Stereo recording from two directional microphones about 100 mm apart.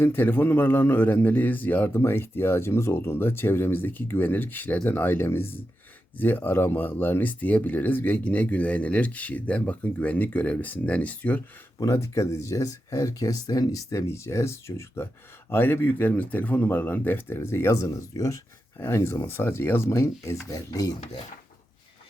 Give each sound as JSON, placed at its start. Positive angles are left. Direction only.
{"t": 0.0, "sound": "speech", "side_deg": 20}
{"t": 11.8, "sound": "speech", "side_deg": 30}
{"t": 20.5, "sound": "rub", "side_deg": 40}